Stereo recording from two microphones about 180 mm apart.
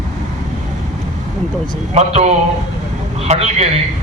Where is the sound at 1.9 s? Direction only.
40° right (ahead or behind).